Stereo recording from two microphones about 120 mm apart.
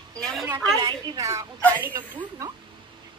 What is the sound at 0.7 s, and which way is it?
Speech, 35° right (ahead or behind).